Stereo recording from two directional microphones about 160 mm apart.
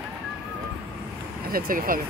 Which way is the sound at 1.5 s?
60° right (ahead or behind).